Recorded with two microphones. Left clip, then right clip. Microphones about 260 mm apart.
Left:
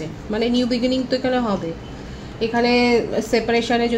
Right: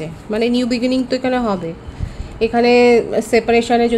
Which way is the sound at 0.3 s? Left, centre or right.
Right.